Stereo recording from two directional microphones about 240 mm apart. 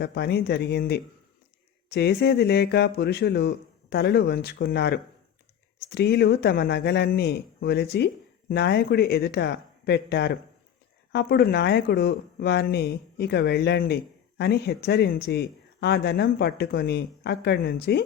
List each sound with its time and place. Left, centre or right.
0.0 s speech: left